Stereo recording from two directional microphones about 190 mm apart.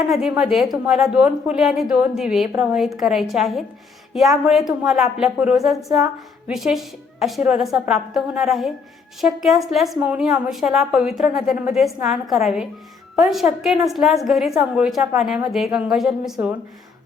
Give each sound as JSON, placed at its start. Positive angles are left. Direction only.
{"t": 0.1, "sound": "a woman's voice", "side_deg": 0}